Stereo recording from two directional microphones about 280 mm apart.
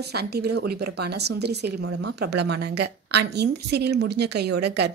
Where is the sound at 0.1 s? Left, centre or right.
Right.